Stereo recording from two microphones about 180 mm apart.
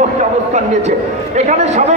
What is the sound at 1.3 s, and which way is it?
Speech, 40° right (ahead or behind).